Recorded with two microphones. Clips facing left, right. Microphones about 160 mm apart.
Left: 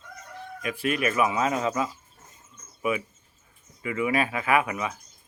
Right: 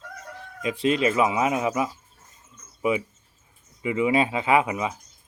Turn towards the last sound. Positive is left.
turn(degrees=-20)  # may be behind; listen again after turning